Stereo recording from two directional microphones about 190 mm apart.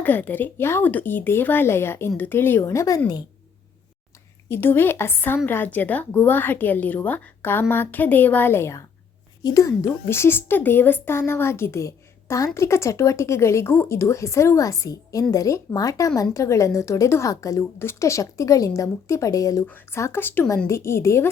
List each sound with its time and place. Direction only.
0.0 s speech: 10° left (ahead or behind)
4.4 s speech: 10° left (ahead or behind)